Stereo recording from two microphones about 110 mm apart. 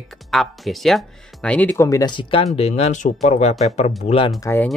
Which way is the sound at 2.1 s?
50° left (ahead or behind).